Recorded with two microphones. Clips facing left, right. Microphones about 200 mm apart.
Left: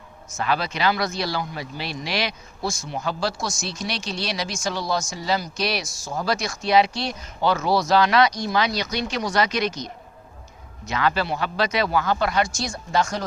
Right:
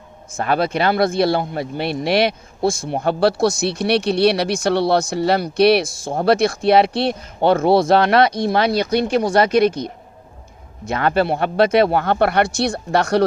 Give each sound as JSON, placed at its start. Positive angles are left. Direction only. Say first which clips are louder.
{"t": 0.3, "sound": "speech", "louder": "right 6 dB", "side_deg": -55}